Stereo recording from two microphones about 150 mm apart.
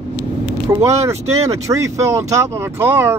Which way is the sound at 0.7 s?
20° right (ahead or behind).